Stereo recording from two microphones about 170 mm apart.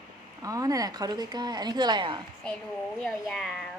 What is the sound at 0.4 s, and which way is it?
A woman's voice, 20° right (ahead or behind).